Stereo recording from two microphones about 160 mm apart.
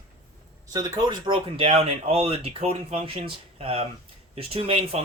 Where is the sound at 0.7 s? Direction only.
25° right (ahead or behind).